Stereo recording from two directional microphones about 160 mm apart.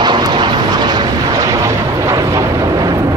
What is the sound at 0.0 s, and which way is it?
Vehicle, 25° right (ahead or behind).